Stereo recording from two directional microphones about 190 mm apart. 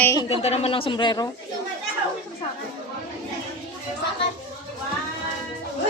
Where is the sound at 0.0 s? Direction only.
15° left (ahead or behind).